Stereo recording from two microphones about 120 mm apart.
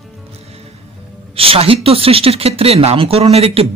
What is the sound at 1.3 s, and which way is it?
Speech, 50° right (ahead or behind).